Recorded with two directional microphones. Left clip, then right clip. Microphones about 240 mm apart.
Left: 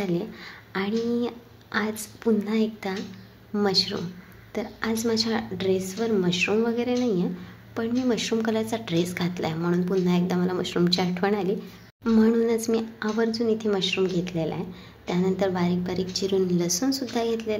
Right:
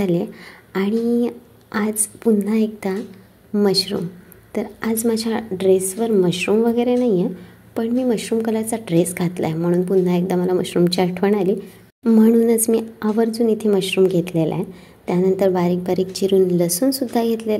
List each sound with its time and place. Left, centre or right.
0.0 s a woman's voice: right